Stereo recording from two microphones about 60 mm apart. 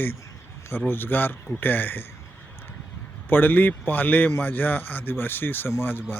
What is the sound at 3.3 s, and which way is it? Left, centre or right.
Speech, left.